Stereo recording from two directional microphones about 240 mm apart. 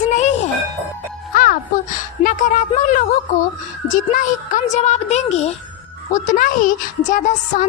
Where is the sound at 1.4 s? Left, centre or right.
Left.